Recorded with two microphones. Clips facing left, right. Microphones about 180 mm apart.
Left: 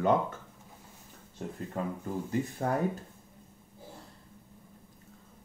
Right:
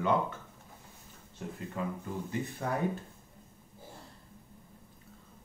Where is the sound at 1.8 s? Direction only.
45° left (ahead or behind).